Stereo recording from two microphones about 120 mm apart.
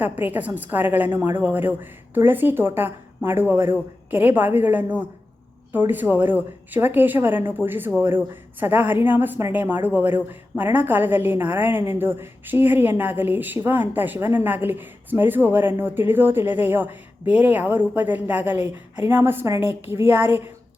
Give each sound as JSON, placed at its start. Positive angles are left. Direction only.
{"t": 0.0, "sound": "a woman's voice", "side_deg": -15}